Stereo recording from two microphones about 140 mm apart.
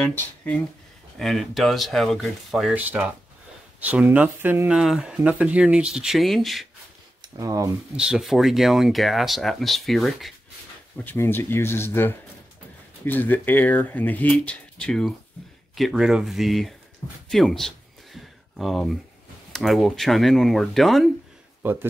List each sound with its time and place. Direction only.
0.0 s speech: 10° left (ahead or behind)
1.1 s speech: centre (ahead or behind)
2.7 s speech: 10° right (ahead or behind)
7.3 s speech: 25° right (ahead or behind)
7.9 s speech: 5° right (ahead or behind)
11.1 s speech: 15° left (ahead or behind); by 16.7 s centre (ahead or behind)
17.3 s a sound: centre (ahead or behind)
19.5 s speech: centre (ahead or behind)
21.6 s speech: 15° right (ahead or behind)